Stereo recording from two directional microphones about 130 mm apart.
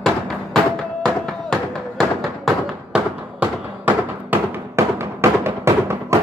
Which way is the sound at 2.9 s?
10° right (ahead or behind).